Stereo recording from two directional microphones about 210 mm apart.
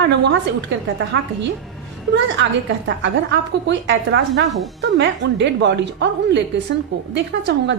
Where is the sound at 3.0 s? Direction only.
55° right (ahead or behind).